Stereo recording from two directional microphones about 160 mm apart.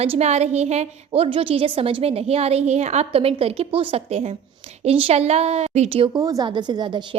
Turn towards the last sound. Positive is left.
turn(degrees=-30)  # may be behind; listen again after turning